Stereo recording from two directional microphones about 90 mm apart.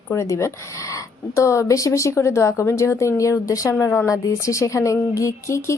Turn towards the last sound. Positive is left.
turn(degrees=35)  # may be behind; listen again after turning